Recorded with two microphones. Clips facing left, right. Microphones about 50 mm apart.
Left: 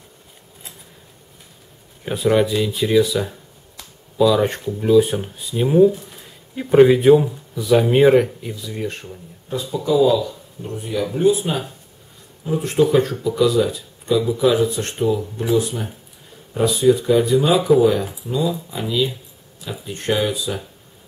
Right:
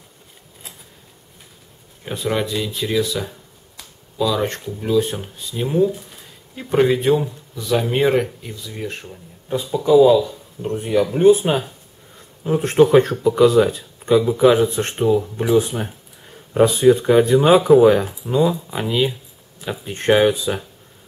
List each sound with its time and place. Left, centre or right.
2.0 s speech: centre
9.5 s speech: right
10.7 s speech: right